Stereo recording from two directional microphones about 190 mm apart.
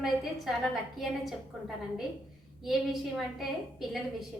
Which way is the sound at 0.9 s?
Centre (ahead or behind).